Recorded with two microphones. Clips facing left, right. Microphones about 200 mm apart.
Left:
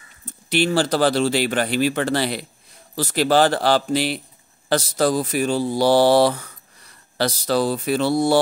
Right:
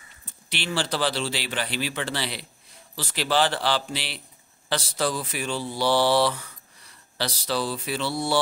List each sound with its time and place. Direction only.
0.2 s speech: 45° left (ahead or behind)